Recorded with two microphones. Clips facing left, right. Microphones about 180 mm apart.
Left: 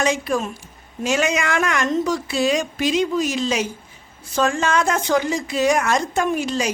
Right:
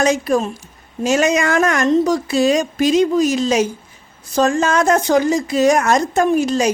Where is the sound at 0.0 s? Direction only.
40° right (ahead or behind).